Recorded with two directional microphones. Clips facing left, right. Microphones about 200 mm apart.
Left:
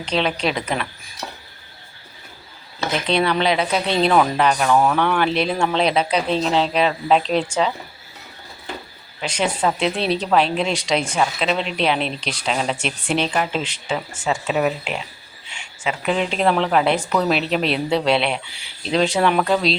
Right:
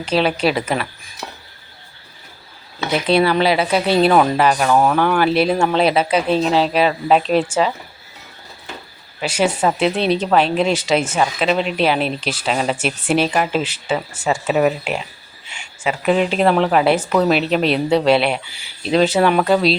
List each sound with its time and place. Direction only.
0.0 s speech: 5° right (ahead or behind)
3.1 s speech: 5° right (ahead or behind)
9.2 s speech: 5° right (ahead or behind)
9.5 s speech: 25° right (ahead or behind)
9.7 s speech: centre (ahead or behind)
14.3 s speech: 45° right (ahead or behind)
16.1 s speech: 5° right (ahead or behind)